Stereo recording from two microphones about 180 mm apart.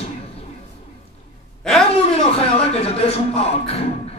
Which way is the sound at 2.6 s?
35° left (ahead or behind).